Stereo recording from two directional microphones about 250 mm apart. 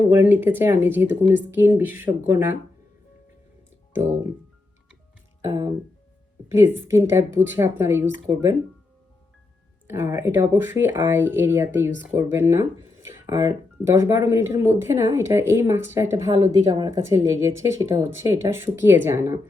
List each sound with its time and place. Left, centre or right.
0.2 s speech: centre
3.9 s speech: centre
5.4 s a sound: centre
6.5 s speech: centre
9.8 s speech: centre